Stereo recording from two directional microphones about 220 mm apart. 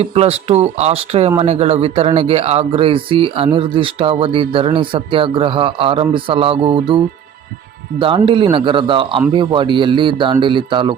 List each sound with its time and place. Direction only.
0.0 s speech: 25° right (ahead or behind)